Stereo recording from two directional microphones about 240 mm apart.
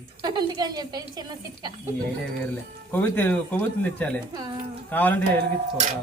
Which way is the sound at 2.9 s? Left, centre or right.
Centre.